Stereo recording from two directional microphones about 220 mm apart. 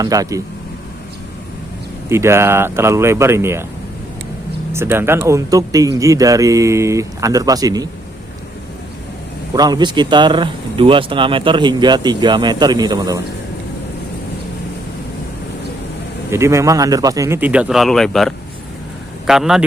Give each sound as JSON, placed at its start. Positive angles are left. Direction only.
{"t": 0.0, "sound": "speech", "side_deg": -15}
{"t": 2.0, "sound": "speech", "side_deg": -10}
{"t": 4.7, "sound": "speech", "side_deg": -10}
{"t": 9.6, "sound": "speech", "side_deg": -20}
{"t": 16.3, "sound": "speech", "side_deg": -10}